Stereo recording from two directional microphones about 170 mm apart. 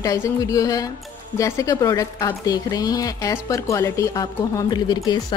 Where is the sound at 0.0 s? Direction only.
20° left (ahead or behind).